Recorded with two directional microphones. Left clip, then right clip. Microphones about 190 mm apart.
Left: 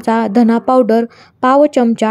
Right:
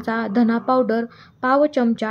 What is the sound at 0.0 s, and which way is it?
A woman's voice, 35° left (ahead or behind).